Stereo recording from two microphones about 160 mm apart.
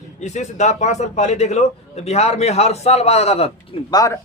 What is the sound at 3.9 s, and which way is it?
Speech, 25° left (ahead or behind).